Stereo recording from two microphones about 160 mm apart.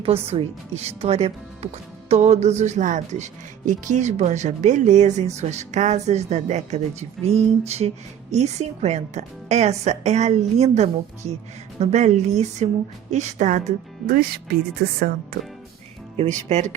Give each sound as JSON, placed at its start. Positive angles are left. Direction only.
{"t": 0.0, "sound": "speech", "side_deg": -35}
{"t": 7.3, "sound": "a sound", "side_deg": -40}
{"t": 8.3, "sound": "speech", "side_deg": -45}
{"t": 15.3, "sound": "speech", "side_deg": -90}
{"t": 16.1, "sound": "speech", "side_deg": -45}